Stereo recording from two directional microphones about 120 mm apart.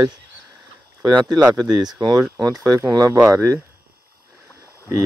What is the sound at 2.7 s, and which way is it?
Speech, 25° right (ahead or behind).